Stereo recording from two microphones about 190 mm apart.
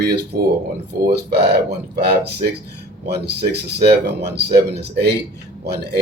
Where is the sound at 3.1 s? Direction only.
55° right (ahead or behind).